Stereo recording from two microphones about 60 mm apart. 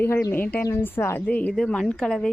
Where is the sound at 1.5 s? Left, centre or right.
Centre.